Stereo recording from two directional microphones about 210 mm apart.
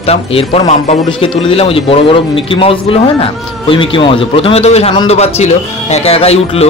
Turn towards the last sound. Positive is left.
turn(degrees=30)  # may be behind; listen again after turning